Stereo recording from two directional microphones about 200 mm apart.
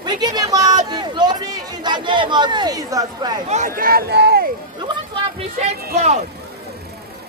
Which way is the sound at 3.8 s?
50° right (ahead or behind).